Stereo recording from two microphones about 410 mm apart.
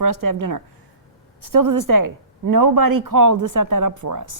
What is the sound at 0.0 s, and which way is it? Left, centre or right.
Speech, right.